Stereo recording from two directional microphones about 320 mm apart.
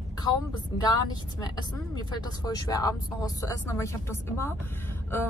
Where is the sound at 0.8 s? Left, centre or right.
Centre.